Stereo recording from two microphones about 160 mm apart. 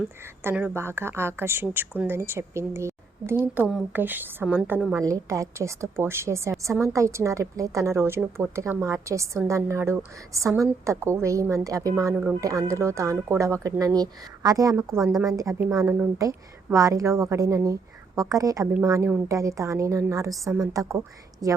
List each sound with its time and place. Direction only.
0.4 s a woman's voice: 15° right (ahead or behind)
14.8 s a woman's voice: centre (ahead or behind)
15.2 s a woman's voice: 20° right (ahead or behind)